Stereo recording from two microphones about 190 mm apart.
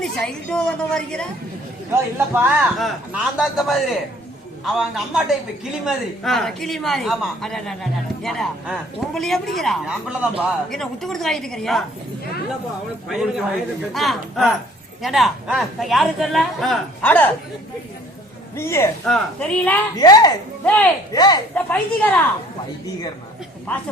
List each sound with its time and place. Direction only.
0.0 s speech: 5° left (ahead or behind)
1.9 s speech: 10° right (ahead or behind)
13.1 s speech: centre (ahead or behind)
18.5 s a woman's voice: 15° left (ahead or behind)
20.0 s speech: 20° left (ahead or behind)
20.7 s a woman's voice: 10° left (ahead or behind)
21.1 s speech: 20° left (ahead or behind)
21.5 s a woman's voice: 10° left (ahead or behind)